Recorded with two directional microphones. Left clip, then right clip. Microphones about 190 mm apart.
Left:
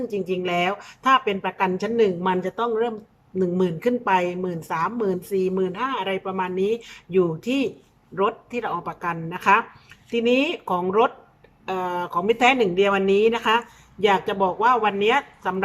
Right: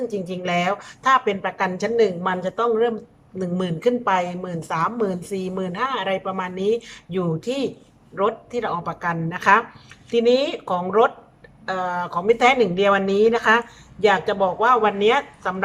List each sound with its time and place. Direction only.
0.1 s a woman's voice: 5° left (ahead or behind)